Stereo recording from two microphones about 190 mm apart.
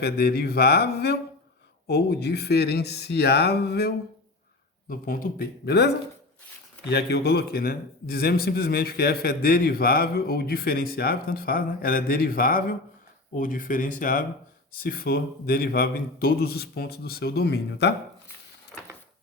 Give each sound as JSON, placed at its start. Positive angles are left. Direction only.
{"t": 0.0, "sound": "a man's voice", "side_deg": 55}